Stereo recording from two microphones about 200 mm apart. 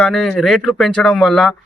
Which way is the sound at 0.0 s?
Centre (ahead or behind).